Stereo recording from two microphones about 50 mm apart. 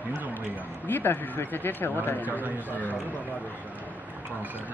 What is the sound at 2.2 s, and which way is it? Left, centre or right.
Speech, right.